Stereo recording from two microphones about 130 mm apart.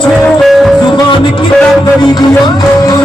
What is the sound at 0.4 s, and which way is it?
Music, centre (ahead or behind).